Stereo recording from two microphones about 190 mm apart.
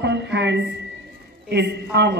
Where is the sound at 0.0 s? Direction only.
65° right (ahead or behind).